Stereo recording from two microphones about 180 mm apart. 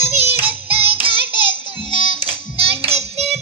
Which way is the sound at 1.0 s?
30° right (ahead or behind).